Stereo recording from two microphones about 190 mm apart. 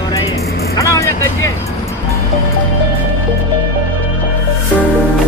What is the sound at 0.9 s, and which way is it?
Vehicle, 15° left (ahead or behind).